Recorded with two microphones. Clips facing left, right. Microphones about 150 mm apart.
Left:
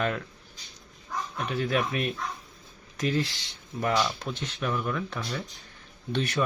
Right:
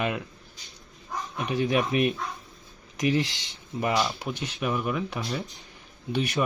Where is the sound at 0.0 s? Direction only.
15° right (ahead or behind).